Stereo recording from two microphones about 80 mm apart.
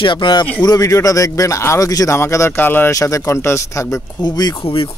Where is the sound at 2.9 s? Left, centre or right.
Left.